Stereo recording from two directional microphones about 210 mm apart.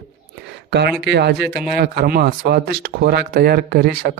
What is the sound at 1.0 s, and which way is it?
A man's voice, 50° right (ahead or behind).